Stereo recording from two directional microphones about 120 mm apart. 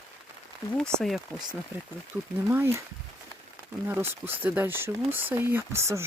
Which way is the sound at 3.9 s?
20° right (ahead or behind).